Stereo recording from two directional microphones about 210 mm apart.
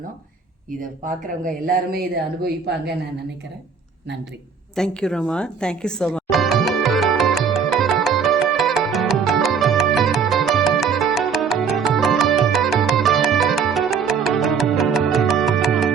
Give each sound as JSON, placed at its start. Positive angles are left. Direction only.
{"t": 1.6, "sound": "speech", "side_deg": -45}
{"t": 4.7, "sound": "music", "side_deg": 5}